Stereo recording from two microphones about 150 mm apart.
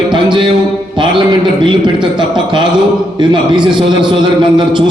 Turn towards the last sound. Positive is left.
turn(degrees=-30)  # may be behind; listen again after turning